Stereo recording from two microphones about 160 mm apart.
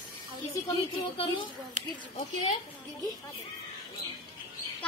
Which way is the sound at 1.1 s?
35° left (ahead or behind).